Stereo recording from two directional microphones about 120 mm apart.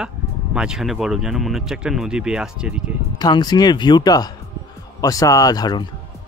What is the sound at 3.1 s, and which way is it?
Speech, 35° left (ahead or behind).